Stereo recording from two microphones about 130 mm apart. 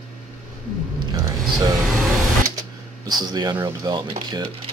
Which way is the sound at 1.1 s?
30° right (ahead or behind).